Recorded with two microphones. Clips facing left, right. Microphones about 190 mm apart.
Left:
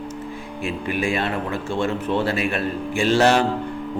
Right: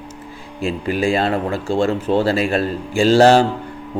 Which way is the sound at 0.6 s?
30° right (ahead or behind).